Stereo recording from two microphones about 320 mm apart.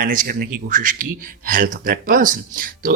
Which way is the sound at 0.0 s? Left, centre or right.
Right.